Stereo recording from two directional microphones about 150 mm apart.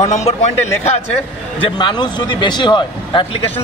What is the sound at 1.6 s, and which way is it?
Speech, 30° left (ahead or behind).